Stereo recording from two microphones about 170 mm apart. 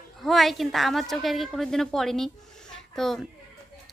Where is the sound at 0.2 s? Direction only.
Centre (ahead or behind).